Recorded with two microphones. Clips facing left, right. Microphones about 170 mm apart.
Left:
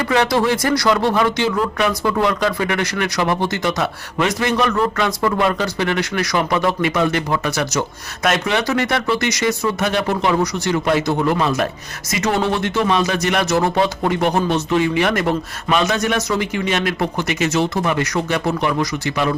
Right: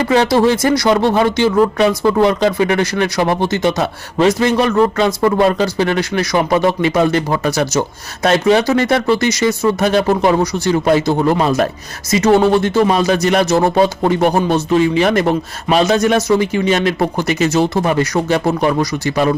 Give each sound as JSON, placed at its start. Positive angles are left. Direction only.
{"t": 0.0, "sound": "speech", "side_deg": -30}